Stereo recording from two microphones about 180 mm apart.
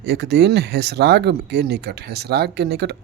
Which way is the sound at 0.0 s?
70° right (ahead or behind).